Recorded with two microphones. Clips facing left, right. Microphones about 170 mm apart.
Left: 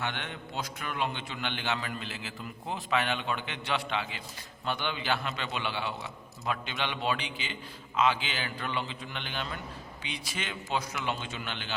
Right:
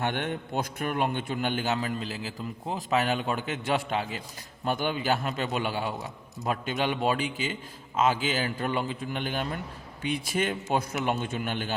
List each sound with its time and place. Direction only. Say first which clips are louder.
0.0 s a man's voice: right 7 dB; 50° right (ahead or behind)